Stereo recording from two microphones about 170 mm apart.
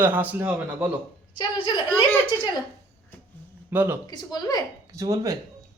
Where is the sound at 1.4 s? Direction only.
30° left (ahead or behind).